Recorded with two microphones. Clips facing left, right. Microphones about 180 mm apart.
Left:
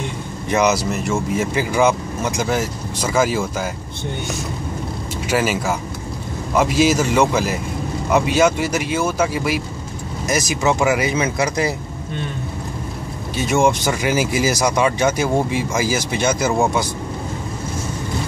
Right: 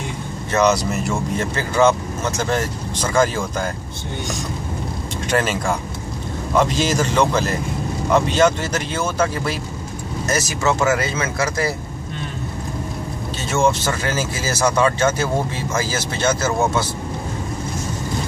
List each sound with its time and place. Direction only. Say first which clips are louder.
0.5 s speech: even; 10° left (ahead or behind)
5.3 s speech: left 1 dB; 5° left (ahead or behind)
13.4 s speech: left 2 dB; 15° left (ahead or behind)